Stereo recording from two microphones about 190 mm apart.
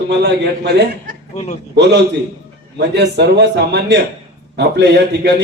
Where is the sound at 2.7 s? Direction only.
65° right (ahead or behind).